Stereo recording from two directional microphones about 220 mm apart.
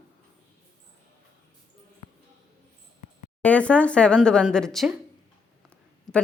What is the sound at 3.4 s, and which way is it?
Speech, 5° left (ahead or behind).